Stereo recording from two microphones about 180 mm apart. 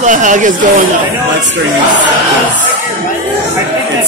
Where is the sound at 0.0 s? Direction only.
45° right (ahead or behind).